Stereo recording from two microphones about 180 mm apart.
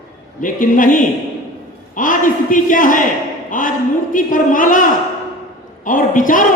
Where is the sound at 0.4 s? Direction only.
45° left (ahead or behind).